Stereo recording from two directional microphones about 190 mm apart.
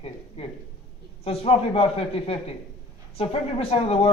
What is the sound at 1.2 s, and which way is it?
A man's voice, 30° left (ahead or behind).